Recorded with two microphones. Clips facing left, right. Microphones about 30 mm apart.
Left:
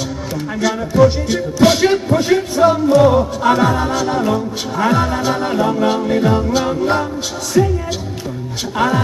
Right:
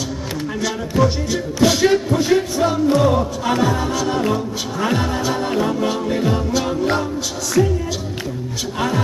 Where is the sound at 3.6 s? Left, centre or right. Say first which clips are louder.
Left 3 dB; left.